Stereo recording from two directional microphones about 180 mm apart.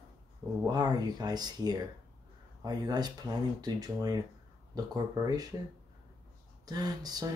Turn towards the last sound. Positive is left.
turn(degrees=-20)  # may be behind; listen again after turning